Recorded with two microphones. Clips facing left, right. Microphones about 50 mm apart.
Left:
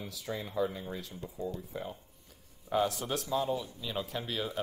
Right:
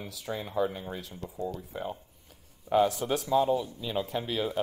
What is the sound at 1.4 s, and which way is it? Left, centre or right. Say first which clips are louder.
Speech: right 3 dB; right.